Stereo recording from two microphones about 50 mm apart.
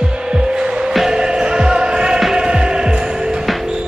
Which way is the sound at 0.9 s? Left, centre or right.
Centre.